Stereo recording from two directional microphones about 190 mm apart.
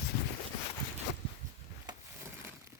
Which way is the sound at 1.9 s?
20° right (ahead or behind).